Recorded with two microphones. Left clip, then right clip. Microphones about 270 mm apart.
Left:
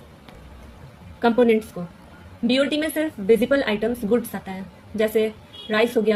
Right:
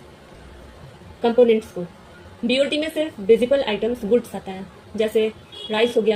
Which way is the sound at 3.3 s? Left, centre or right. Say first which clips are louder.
Right 1 dB; left.